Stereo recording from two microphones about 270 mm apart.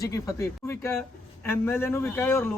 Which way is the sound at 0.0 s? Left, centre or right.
Centre.